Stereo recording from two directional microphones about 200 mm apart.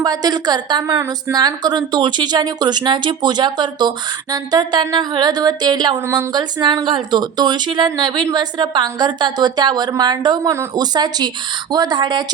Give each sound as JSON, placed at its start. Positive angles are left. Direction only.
{"t": 0.0, "sound": "a woman's voice", "side_deg": -20}